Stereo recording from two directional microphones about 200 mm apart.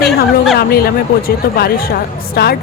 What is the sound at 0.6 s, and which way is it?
A woman's voice, 50° left (ahead or behind).